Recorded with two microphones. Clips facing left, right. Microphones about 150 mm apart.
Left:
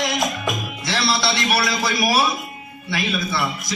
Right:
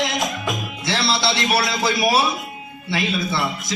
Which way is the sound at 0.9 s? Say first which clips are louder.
Even; 25° right (ahead or behind).